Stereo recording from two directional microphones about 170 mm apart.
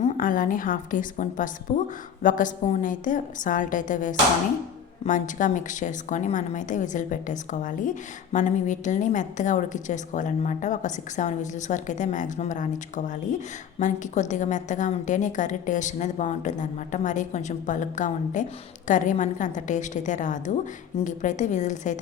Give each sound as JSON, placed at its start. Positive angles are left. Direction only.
{"t": 0.0, "sound": "a woman's voice", "side_deg": 50}